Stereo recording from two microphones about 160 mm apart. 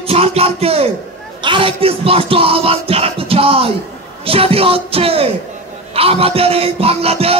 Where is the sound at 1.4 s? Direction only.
30° right (ahead or behind).